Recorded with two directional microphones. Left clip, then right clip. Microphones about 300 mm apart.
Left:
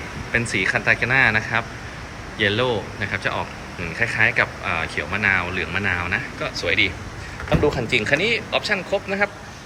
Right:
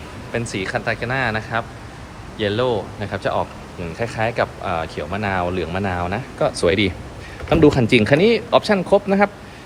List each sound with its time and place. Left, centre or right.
0.5 s speech: centre